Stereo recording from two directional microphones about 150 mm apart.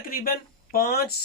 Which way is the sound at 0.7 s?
90° left.